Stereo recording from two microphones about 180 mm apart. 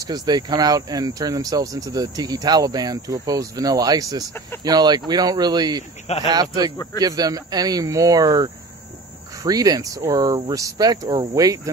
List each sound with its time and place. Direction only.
0.0 s speech: 20° right (ahead or behind)